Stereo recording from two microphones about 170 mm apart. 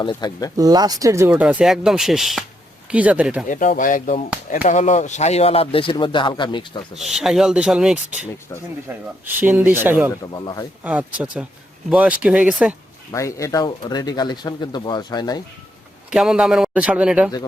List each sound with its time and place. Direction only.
0.0 s speech: 25° left (ahead or behind)
0.5 s speech: 20° right (ahead or behind)
3.5 s speech: 50° left (ahead or behind); by 6.7 s 25° left (ahead or behind)
6.9 s a man's voice: centre (ahead or behind)
10.3 s speech: 20° left (ahead or behind)
10.8 s speech: 5° right (ahead or behind)
13.1 s speech: 20° left (ahead or behind)
16.0 s a man's voice: 5° right (ahead or behind)